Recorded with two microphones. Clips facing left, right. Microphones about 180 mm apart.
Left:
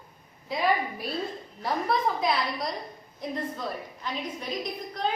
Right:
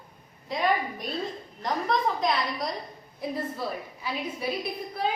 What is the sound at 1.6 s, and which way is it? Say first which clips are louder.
A woman's voice: even; 5° left (ahead or behind).